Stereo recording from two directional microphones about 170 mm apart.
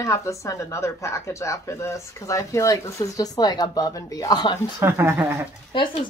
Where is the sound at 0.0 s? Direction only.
20° left (ahead or behind).